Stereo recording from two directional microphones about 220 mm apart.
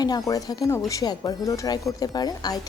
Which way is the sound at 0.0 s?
15° left (ahead or behind).